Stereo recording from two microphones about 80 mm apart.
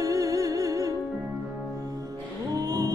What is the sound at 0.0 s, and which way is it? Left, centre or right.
Music, right.